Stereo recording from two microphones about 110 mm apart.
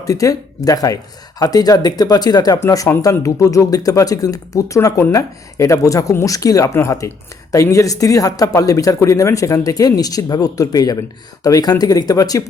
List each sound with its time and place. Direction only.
0.0 s speech: 30° left (ahead or behind)